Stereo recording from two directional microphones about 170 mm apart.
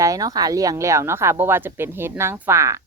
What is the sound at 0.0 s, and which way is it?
Speech, 20° right (ahead or behind).